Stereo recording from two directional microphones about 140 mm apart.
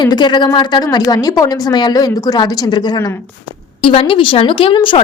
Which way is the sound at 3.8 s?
40° left (ahead or behind).